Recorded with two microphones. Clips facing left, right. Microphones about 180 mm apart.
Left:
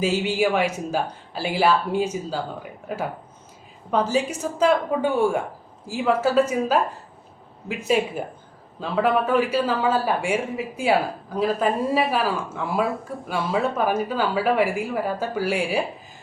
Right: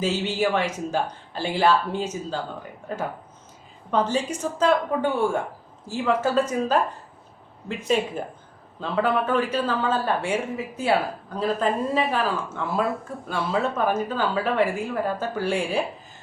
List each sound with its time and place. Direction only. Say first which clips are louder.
0.0 s speech: left 2 dB; 10° left (ahead or behind)
3.9 s speech: left 1 dB; 10° left (ahead or behind)